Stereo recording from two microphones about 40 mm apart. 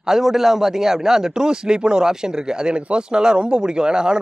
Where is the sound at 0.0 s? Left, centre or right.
Centre.